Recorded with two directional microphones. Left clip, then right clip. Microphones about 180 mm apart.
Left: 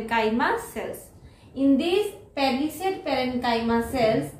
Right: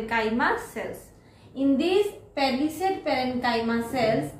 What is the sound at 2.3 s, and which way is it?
A woman's voice, 15° left (ahead or behind).